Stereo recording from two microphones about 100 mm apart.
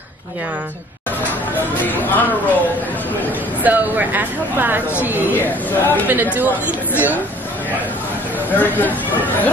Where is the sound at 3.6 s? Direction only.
15° right (ahead or behind).